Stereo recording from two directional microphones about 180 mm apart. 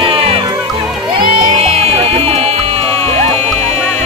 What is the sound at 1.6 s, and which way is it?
Music, 35° right (ahead or behind).